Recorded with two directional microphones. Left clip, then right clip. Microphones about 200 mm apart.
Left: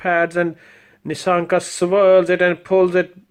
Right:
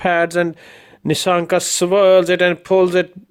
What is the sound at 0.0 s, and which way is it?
Speech, 40° right (ahead or behind).